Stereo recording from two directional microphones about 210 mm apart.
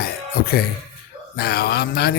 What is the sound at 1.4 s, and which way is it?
Music, 50° left (ahead or behind).